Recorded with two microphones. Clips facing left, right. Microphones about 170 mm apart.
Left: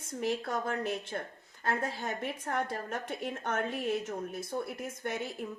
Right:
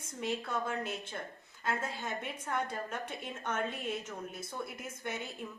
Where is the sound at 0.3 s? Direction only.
40° left (ahead or behind).